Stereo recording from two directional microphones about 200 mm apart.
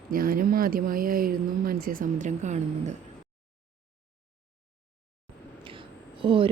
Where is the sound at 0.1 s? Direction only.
45° right (ahead or behind).